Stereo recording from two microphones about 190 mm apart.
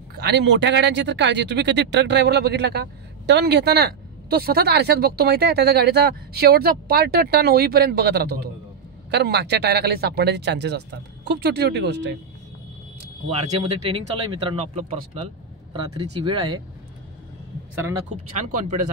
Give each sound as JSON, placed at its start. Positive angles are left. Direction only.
{"t": 0.1, "sound": "speech", "side_deg": -60}
{"t": 13.4, "sound": "speech", "side_deg": -30}
{"t": 18.1, "sound": "speech", "side_deg": -40}